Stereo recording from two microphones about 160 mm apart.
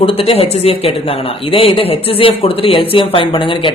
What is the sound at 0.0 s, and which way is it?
Speech, 35° left (ahead or behind).